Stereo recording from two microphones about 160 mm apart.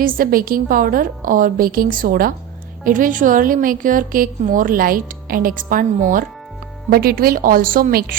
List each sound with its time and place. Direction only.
0.0 s a woman's voice: 60° right (ahead or behind)
6.9 s a woman's voice: 70° right (ahead or behind)